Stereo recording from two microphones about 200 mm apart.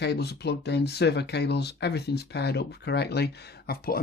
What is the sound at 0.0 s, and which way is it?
Speech, 55° left (ahead or behind).